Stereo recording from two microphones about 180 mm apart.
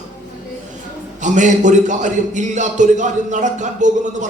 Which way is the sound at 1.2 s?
45° right (ahead or behind).